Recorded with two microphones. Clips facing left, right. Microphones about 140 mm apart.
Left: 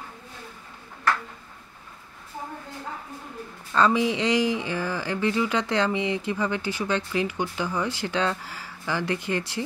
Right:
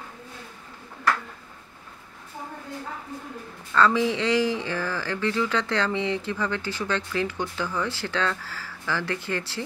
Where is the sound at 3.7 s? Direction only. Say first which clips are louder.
Even; 15° left (ahead or behind).